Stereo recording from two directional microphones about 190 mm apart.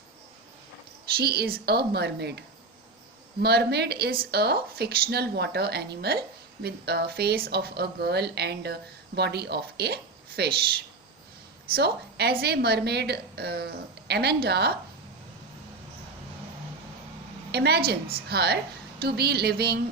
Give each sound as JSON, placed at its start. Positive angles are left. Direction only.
{"t": 1.1, "sound": "speech", "side_deg": -55}
{"t": 3.4, "sound": "speech", "side_deg": -60}
{"t": 11.7, "sound": "speech", "side_deg": -60}
{"t": 17.5, "sound": "speech", "side_deg": -60}